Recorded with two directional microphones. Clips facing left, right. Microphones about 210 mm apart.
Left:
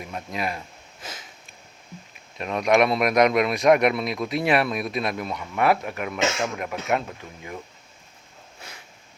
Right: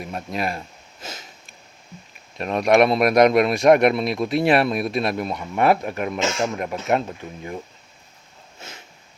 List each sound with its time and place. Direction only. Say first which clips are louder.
0.1 s speech: right 3 dB; 35° right (ahead or behind)
2.4 s speech: right 3 dB; 35° right (ahead or behind)